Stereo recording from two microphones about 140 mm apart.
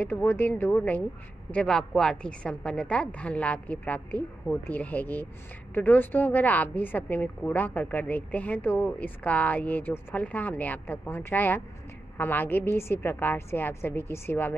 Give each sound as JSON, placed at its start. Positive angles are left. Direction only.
{"t": 0.0, "sound": "a woman's voice", "side_deg": 15}